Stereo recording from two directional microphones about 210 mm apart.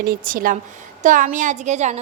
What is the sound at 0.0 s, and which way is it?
A woman's voice, 45° right (ahead or behind).